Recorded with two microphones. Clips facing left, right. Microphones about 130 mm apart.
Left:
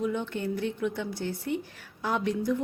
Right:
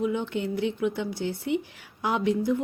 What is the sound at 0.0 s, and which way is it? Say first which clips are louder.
Speech: right 2 dB; 60° right (ahead or behind).